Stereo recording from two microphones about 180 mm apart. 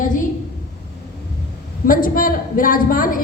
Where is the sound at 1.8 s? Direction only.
50° left (ahead or behind).